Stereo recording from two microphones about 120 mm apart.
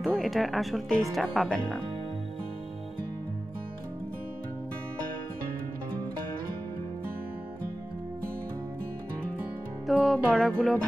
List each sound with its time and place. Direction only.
0.0 s speech: centre (ahead or behind)
9.8 s music: centre (ahead or behind)